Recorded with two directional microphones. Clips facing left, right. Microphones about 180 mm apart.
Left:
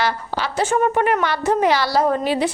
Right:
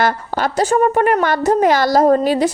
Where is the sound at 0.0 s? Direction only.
50° right (ahead or behind).